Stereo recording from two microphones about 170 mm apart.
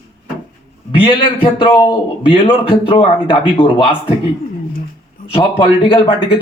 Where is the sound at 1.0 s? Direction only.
30° left (ahead or behind).